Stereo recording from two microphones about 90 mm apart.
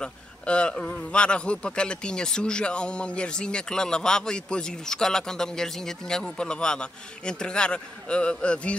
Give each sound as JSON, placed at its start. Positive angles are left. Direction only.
{"t": 0.0, "sound": "a man's voice", "side_deg": 10}